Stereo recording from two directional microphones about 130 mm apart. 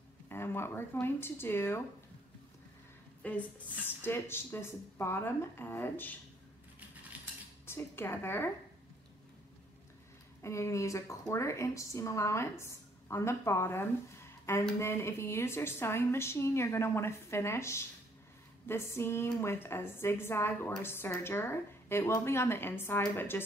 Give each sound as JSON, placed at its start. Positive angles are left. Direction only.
{"t": 0.3, "sound": "a woman's voice", "side_deg": 20}
{"t": 3.2, "sound": "a sound", "side_deg": 10}
{"t": 3.8, "sound": "a woman's voice", "side_deg": 15}
{"t": 7.1, "sound": "cutlery", "side_deg": -10}
{"t": 7.6, "sound": "a woman's voice", "side_deg": 20}
{"t": 10.4, "sound": "a woman's voice", "side_deg": 20}